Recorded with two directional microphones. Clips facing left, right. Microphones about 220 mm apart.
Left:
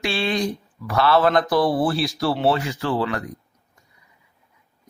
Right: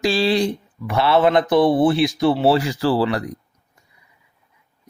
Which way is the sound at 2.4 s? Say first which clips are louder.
Right 4 dB; 30° right (ahead or behind).